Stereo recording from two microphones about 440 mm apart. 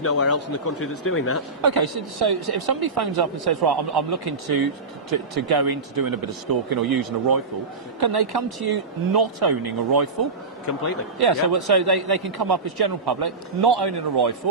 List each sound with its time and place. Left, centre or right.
0.0 s speech: left
1.6 s a man's voice: right
11.2 s a man's voice: right